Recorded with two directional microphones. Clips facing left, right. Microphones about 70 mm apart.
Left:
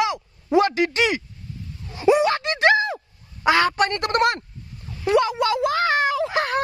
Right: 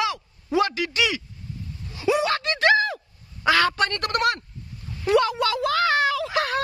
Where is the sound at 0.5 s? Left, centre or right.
Left.